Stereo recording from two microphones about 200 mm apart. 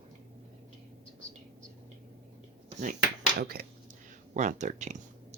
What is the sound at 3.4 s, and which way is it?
Speech, 50° right (ahead or behind).